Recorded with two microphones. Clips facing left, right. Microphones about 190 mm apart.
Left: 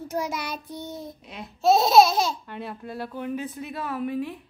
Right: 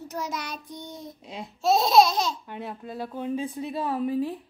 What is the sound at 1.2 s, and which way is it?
Speech, 25° right (ahead or behind).